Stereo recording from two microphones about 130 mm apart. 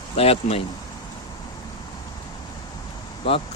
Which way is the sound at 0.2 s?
50° left (ahead or behind).